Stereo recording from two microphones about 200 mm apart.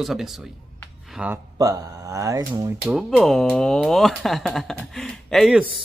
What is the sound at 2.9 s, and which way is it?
A man's voice, centre (ahead or behind).